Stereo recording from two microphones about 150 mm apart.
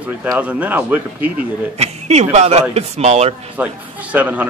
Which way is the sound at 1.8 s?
45° right (ahead or behind).